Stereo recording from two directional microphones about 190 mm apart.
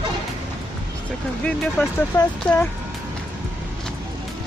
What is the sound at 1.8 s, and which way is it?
Speech, 10° left (ahead or behind).